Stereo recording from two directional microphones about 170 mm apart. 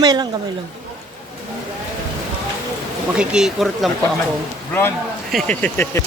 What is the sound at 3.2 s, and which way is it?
Speech, 5° right (ahead or behind).